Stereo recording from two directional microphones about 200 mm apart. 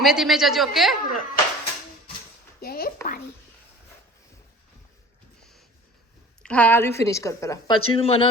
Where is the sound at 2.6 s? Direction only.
50° left (ahead or behind).